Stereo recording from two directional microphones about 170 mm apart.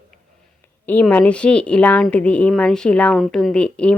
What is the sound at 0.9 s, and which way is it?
A woman's voice, 10° left (ahead or behind).